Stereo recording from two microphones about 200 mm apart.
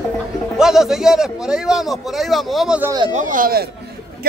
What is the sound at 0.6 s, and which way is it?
A man's voice, centre (ahead or behind).